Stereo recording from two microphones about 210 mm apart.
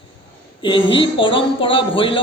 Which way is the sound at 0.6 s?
25° left (ahead or behind).